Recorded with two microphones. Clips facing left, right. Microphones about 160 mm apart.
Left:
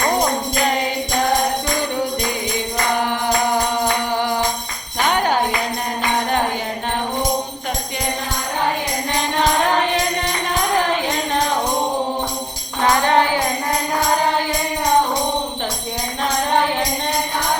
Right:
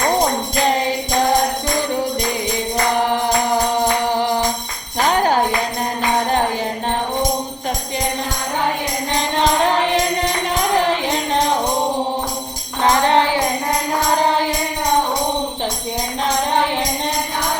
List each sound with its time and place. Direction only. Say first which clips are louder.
5.0 s jingle bell: right 2 dB; 35° right (ahead or behind)
12.8 s music: right 1 dB; 25° right (ahead or behind)